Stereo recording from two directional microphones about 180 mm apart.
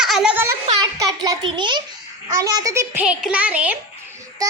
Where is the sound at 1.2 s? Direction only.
25° right (ahead or behind).